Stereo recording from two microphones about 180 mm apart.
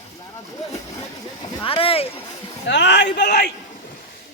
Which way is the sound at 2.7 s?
80° left.